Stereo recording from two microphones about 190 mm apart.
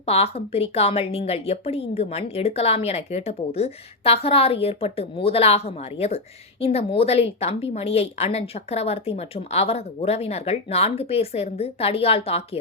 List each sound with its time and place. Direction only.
0.0 s a woman's voice: 30° left (ahead or behind)